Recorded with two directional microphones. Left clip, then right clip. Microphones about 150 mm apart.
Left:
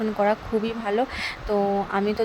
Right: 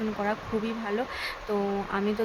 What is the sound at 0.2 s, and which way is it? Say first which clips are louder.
Speech: left 9 dB; 30° left (ahead or behind).